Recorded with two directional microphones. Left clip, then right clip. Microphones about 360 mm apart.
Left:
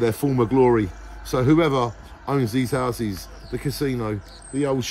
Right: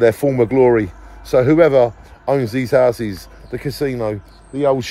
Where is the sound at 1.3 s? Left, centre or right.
Right.